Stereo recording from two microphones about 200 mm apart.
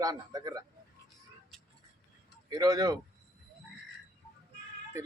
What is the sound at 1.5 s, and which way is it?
Music, centre (ahead or behind).